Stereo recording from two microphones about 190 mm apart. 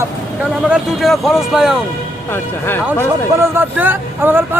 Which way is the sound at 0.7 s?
Centre (ahead or behind).